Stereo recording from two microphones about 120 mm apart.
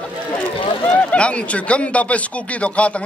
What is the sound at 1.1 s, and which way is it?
A man's voice, 10° left (ahead or behind).